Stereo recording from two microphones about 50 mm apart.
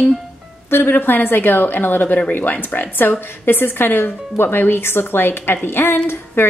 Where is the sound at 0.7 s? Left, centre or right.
Left.